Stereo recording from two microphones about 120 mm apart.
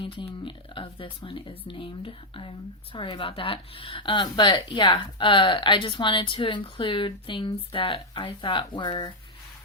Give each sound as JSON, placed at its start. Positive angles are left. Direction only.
{"t": 0.0, "sound": "speech", "side_deg": 45}